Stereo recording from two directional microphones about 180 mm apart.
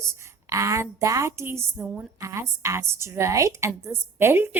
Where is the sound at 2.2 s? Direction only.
15° right (ahead or behind).